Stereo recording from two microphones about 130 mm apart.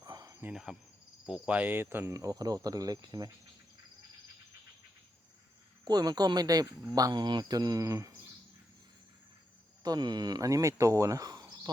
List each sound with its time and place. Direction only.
0.0 s cricket: 30° right (ahead or behind)
0.4 s insect: 5° right (ahead or behind)
1.3 s speech: 10° right (ahead or behind); by 3.2 s 30° right (ahead or behind)
5.8 s speech: 30° right (ahead or behind)
9.8 s speech: 30° right (ahead or behind)